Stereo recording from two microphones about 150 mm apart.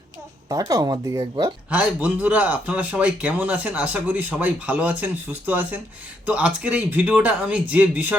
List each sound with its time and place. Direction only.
0.4 s speech: 20° right (ahead or behind)
1.7 s speech: 10° right (ahead or behind)